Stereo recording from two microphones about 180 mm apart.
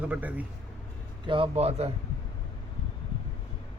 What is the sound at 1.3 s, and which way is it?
Speech, 30° right (ahead or behind).